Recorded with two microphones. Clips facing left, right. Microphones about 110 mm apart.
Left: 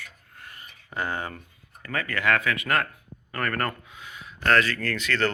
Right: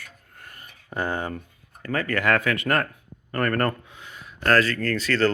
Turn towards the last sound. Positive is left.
turn(degrees=-35)  # may be behind; listen again after turning